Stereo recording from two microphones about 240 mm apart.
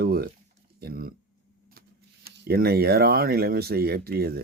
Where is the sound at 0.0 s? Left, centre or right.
Right.